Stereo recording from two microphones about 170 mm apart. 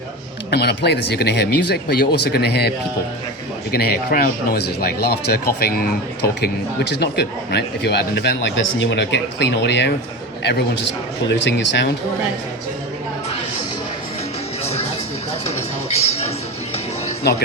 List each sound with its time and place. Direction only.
0.5 s speech: 75° left (ahead or behind); by 9.9 s 90° left
11.3 s speech: 90° left
14.6 s music: 35° left (ahead or behind)